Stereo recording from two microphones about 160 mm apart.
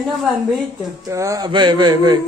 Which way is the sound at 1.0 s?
20° right (ahead or behind).